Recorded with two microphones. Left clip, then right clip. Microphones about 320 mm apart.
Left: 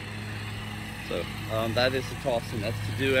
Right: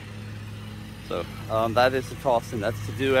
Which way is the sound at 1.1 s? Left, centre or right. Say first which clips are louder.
Right 4 dB; centre.